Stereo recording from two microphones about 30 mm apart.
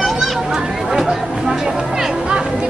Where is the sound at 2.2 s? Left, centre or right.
Right.